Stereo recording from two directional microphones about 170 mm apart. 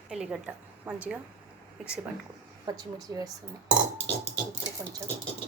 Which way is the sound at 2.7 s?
20° right (ahead or behind).